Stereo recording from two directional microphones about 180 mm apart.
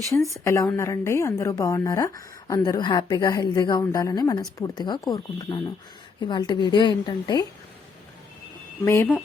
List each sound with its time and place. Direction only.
0.1 s a woman's voice: 10° left (ahead or behind)
8.8 s speech: 15° left (ahead or behind)